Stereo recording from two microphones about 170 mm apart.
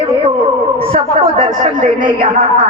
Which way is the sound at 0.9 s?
40° right (ahead or behind).